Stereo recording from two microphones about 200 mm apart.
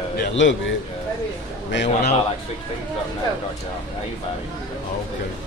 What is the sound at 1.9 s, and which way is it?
Speech, 35° left (ahead or behind).